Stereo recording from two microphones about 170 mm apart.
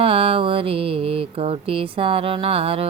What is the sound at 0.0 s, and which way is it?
Mantra, 35° right (ahead or behind).